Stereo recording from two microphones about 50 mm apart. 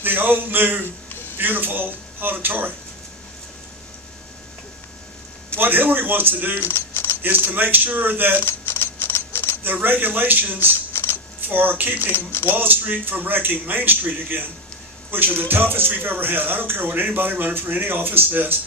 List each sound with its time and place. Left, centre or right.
0.0 s speech: right
5.5 s speech: right
6.6 s a sound: left
7.2 s speech: right
8.4 s camera: left
9.6 s speech: right
10.9 s shuffling cards: left
11.4 s speech: right
12.0 s speech: left
12.5 s speech: right